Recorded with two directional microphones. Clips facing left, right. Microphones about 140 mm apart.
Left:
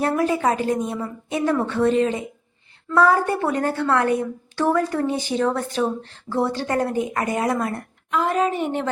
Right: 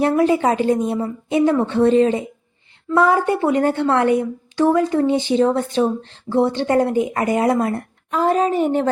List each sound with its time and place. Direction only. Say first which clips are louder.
0.0 s speech: right 4 dB; 25° right (ahead or behind)
2.9 s speech: right 2 dB; 20° right (ahead or behind); by 8.9 s 40° right (ahead or behind)